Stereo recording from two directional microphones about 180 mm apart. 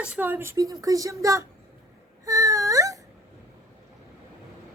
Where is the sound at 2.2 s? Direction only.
20° right (ahead or behind).